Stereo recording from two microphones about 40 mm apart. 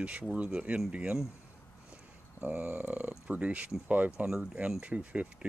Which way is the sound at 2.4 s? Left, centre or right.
Right.